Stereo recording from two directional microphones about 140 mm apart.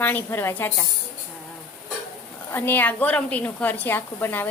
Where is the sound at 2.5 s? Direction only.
15° left (ahead or behind).